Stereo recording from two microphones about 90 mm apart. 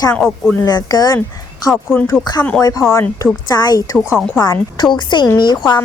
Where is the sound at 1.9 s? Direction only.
5° right (ahead or behind).